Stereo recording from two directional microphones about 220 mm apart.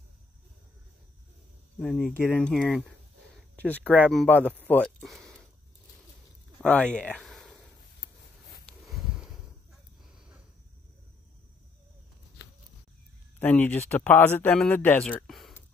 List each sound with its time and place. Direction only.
1.8 s speech: centre (ahead or behind)
3.9 s speech: 5° right (ahead or behind)
6.6 s speech: 5° left (ahead or behind)
8.0 s a sound: 45° left (ahead or behind)
8.8 s a sound: centre (ahead or behind)
13.4 s speech: 5° left (ahead or behind)